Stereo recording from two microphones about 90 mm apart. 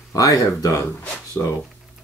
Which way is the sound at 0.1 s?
40° left (ahead or behind).